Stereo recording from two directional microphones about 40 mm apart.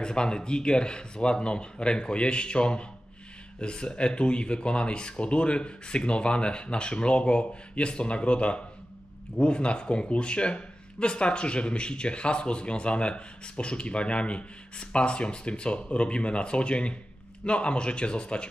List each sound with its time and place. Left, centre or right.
0.0 s speech: centre